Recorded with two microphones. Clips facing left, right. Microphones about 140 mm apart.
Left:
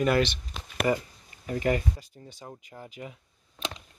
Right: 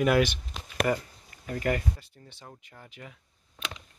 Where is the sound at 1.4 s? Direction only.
15° left (ahead or behind).